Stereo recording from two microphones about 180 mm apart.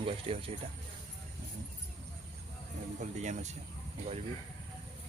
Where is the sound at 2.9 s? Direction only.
40° right (ahead or behind).